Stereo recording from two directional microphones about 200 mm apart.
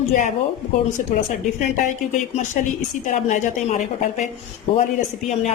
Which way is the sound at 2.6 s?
40° left (ahead or behind).